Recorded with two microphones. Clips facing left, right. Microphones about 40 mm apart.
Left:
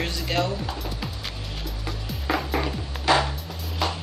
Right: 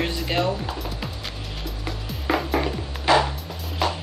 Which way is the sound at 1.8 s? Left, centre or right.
Centre.